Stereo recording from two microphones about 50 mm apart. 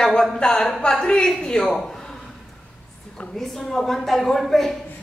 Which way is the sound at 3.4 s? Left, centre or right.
Centre.